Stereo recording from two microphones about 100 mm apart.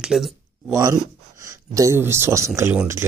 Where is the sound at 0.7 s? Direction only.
35° right (ahead or behind).